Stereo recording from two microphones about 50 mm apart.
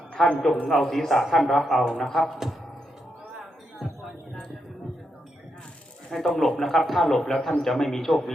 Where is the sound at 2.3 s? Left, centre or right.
Centre.